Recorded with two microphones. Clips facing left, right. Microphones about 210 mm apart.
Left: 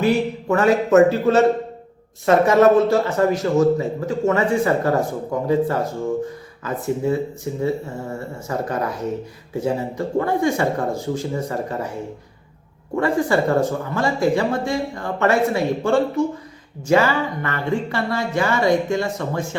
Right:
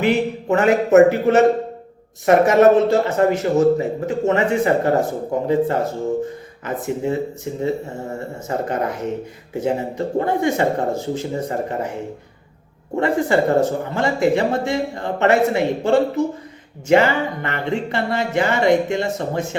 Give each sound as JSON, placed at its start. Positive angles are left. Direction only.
{"t": 0.0, "sound": "speech", "side_deg": -20}
{"t": 8.4, "sound": "speech", "side_deg": -25}
{"t": 13.0, "sound": "speech", "side_deg": -20}